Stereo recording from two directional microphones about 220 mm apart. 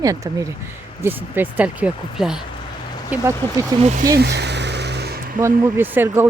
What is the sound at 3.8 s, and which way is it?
Speech, 30° right (ahead or behind).